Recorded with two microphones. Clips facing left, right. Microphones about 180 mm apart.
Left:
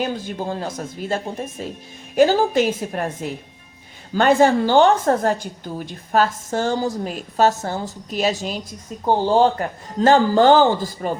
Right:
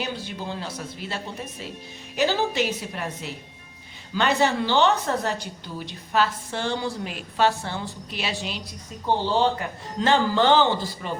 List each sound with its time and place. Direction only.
0.0 s a woman's voice: 45° left (ahead or behind)